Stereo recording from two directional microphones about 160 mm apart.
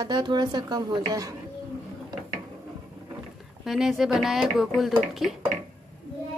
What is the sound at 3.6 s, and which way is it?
A woman's voice, centre (ahead or behind).